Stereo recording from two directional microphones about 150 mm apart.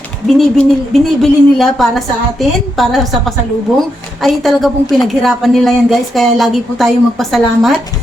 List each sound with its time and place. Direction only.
0.3 s a woman's voice: centre (ahead or behind)